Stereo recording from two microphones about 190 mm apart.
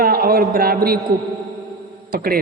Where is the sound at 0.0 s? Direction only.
50° right (ahead or behind).